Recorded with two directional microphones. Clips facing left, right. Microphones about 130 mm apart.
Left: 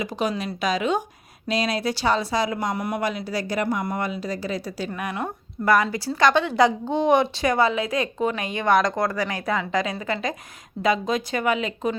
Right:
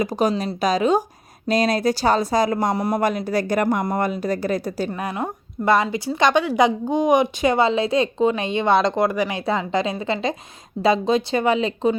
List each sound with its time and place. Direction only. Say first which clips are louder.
0.0 s speech: right 5 dB; 40° right (ahead or behind)
3.0 s speech: right 5 dB; 50° right (ahead or behind)
4.9 s a woman's voice: right 3 dB; 30° right (ahead or behind)